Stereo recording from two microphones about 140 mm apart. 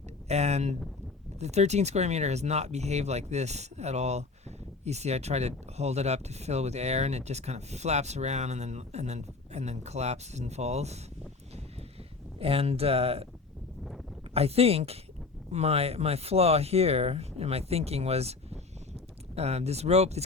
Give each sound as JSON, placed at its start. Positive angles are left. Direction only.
{"t": 0.3, "sound": "speech", "side_deg": -50}
{"t": 12.4, "sound": "speech", "side_deg": -45}
{"t": 14.3, "sound": "speech", "side_deg": -45}